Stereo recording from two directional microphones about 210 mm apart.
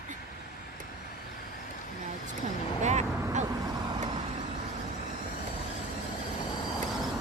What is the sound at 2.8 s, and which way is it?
Vehicle, 35° right (ahead or behind).